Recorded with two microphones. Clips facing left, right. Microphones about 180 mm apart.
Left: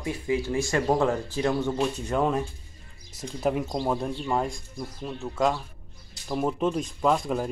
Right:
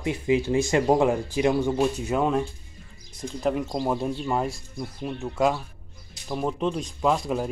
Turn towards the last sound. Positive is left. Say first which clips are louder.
# even
turn(degrees=0)  # may be behind; listen again after turning